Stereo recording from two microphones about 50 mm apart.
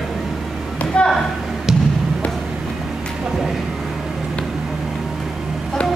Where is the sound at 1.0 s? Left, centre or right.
Left.